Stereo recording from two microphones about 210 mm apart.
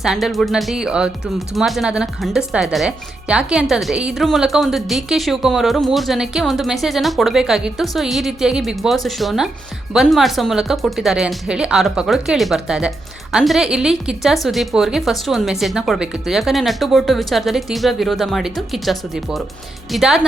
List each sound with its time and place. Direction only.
0.0 s speech: centre (ahead or behind)